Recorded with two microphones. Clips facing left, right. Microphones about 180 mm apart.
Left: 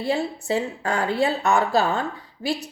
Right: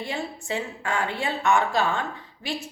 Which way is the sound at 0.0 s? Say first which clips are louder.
Left 7 dB; 35° left (ahead or behind).